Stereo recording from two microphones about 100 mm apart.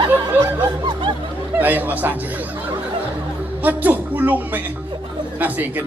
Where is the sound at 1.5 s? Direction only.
15° right (ahead or behind).